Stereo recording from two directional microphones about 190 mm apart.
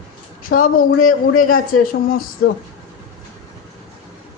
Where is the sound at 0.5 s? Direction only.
45° left (ahead or behind).